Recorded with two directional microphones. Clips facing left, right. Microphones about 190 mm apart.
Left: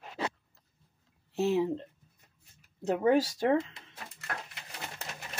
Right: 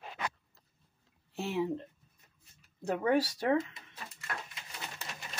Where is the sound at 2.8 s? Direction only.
20° left (ahead or behind).